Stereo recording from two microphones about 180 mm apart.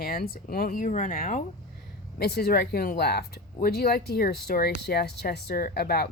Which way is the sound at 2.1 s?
60° left (ahead or behind).